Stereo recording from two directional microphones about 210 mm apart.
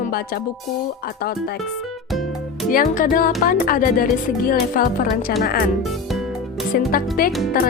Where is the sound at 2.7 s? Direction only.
40° left (ahead or behind).